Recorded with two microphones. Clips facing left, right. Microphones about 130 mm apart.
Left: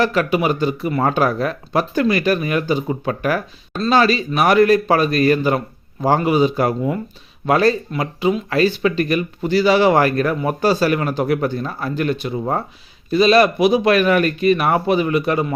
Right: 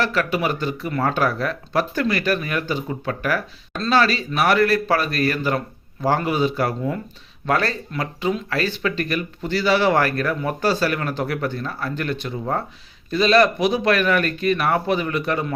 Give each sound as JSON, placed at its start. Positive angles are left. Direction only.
{"t": 0.0, "sound": "speech", "side_deg": 15}